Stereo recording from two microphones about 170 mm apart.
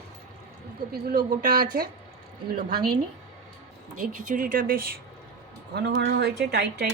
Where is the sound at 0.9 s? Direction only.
65° right (ahead or behind).